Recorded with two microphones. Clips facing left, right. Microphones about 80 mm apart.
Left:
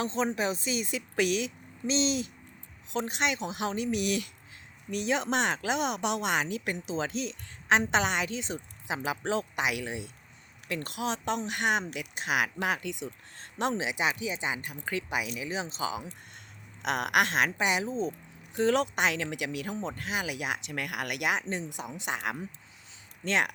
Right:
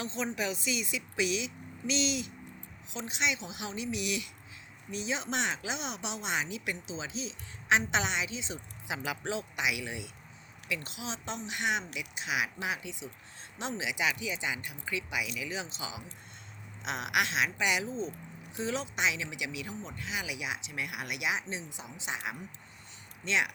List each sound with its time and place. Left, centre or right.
0.0 s speech: left
1.1 s speech: left
1.9 s speech: left
2.9 s speech: left
4.9 s speech: left
8.9 s speech: left
10.7 s speech: left
13.7 s speech: left
16.8 s speech: left
17.6 s speech: left
18.5 s speech: left